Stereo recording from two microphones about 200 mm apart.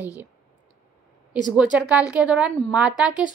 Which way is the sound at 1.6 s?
5° right (ahead or behind).